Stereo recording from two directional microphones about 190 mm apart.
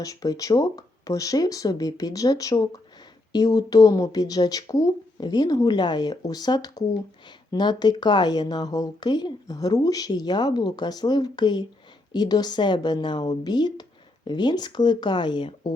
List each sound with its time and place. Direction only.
0.0 s speech: 20° left (ahead or behind)